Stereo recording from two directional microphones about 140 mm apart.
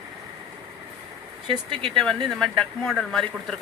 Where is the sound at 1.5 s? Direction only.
35° right (ahead or behind).